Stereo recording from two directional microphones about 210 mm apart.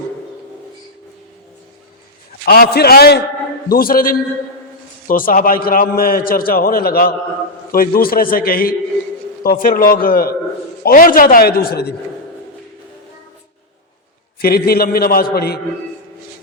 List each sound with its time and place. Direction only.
2.4 s a man's voice: 45° left (ahead or behind)
14.3 s a man's voice: 45° left (ahead or behind)